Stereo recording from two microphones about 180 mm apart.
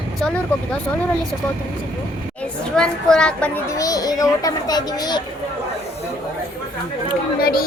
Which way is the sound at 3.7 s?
20° left (ahead or behind).